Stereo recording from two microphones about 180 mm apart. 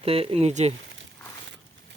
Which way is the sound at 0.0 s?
30° right (ahead or behind).